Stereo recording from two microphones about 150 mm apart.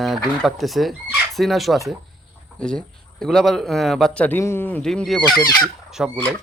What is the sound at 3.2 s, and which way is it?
Speech, centre (ahead or behind).